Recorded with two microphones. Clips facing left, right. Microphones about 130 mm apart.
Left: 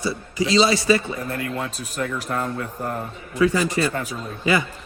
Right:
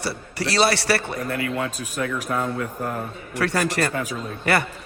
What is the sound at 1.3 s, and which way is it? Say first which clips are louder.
A man's voice: right 2 dB; 10° right (ahead or behind).